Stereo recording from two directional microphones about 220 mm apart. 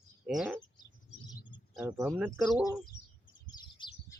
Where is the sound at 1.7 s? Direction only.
5° right (ahead or behind).